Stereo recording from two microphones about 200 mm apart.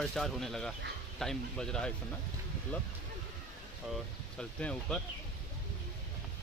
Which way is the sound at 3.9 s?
5° left (ahead or behind).